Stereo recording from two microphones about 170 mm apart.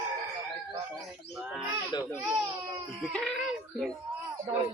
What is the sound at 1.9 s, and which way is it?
Baby cry, 25° left (ahead or behind).